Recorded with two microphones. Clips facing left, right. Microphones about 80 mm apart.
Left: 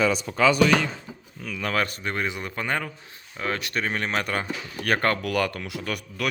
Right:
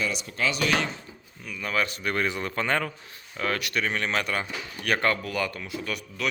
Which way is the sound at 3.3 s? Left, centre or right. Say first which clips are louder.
Even; left.